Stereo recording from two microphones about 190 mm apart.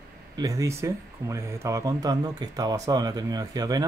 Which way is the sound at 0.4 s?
15° right (ahead or behind).